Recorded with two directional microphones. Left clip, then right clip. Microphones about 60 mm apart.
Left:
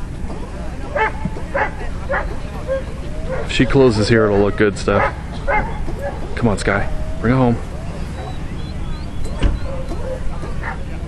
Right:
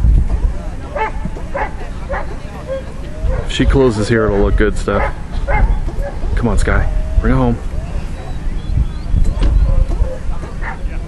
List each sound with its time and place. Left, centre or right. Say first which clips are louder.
0.9 s bow-wow: left 1 dB; left
3.4 s speech: even; right
5.0 s bow-wow: left 2 dB; left
6.3 s speech: even; right